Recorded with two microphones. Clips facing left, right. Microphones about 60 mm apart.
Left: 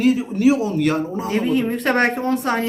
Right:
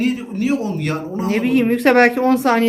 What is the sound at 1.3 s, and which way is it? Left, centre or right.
Speech, right.